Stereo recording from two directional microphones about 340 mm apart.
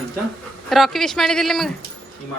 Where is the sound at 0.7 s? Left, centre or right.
Centre.